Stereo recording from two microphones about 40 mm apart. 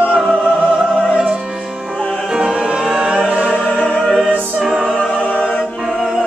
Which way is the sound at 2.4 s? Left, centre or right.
Centre.